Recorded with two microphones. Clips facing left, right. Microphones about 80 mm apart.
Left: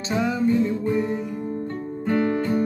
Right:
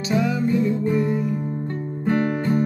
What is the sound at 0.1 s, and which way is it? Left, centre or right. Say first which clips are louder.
Music: right 2 dB; left.